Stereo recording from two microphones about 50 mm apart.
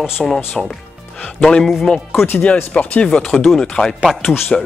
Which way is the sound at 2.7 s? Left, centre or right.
Left.